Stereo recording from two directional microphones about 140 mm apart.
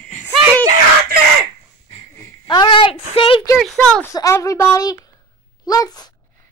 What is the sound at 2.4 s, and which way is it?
Speech, 35° left (ahead or behind).